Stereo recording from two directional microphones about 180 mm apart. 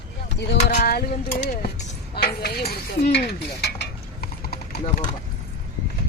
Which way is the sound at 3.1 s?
65° left (ahead or behind).